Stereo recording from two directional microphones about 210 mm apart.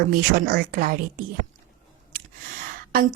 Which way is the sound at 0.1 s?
45° right (ahead or behind).